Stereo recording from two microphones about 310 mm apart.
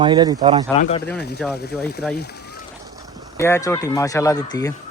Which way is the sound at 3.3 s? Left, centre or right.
Centre.